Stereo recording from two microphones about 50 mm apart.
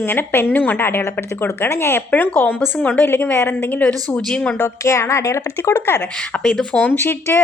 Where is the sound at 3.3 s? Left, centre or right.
Left.